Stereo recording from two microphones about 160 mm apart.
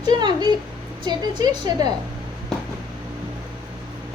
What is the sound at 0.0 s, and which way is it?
A woman's voice, 30° right (ahead or behind).